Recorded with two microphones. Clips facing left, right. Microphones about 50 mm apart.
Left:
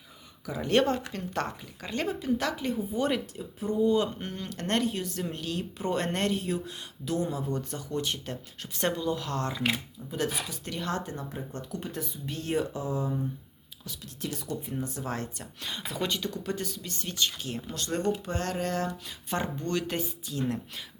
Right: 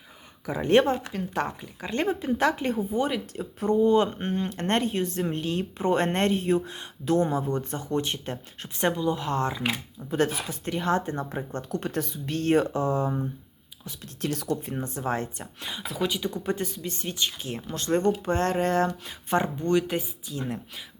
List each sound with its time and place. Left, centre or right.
0.4 s speech: right
1.1 s speech: centre
1.9 s speech: right
3.3 s speech: right
3.8 s speech: right
10.1 s speech: right
11.8 s speech: right
14.2 s speech: right
14.7 s speech: right
15.9 s speech: centre
16.3 s speech: right; by 20.8 s centre